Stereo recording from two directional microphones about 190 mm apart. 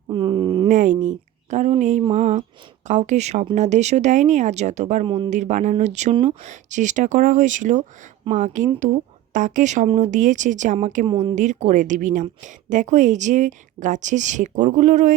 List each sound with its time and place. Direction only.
0.1 s a sound: 25° right (ahead or behind)
0.7 s a sound: 40° right (ahead or behind)
1.0 s a woman's voice: 40° right (ahead or behind)
5.0 s speech: 25° right (ahead or behind)
5.3 s a woman's voice: 40° right (ahead or behind)
11.0 s speech: 25° right (ahead or behind)
11.3 s a woman's voice: 40° right (ahead or behind)